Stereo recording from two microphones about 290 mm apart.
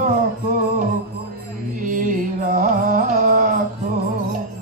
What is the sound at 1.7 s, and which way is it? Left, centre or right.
Carnatic music, right.